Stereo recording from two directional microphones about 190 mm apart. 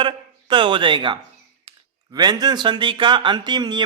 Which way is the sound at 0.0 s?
25° right (ahead or behind).